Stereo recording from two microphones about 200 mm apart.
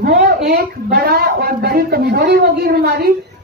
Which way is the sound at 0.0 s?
50° right (ahead or behind).